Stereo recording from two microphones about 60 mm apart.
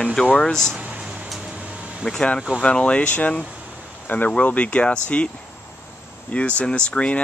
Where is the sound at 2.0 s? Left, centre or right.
Centre.